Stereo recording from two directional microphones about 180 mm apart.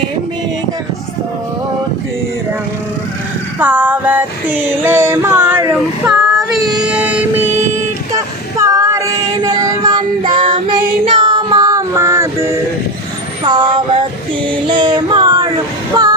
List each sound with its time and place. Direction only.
3.6 s music: 10° right (ahead or behind)
6.3 s child singing: centre (ahead or behind)
13.4 s a sound: 25° right (ahead or behind)
14.7 s child singing: 25° right (ahead or behind)
16.0 s music: 20° right (ahead or behind)